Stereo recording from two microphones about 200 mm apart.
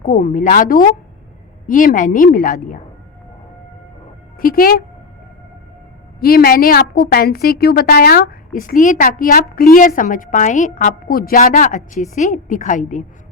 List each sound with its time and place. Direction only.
0.0 s a woman's voice: 40° left (ahead or behind)
4.4 s speech: 45° left (ahead or behind)
6.1 s a woman's voice: 50° left (ahead or behind)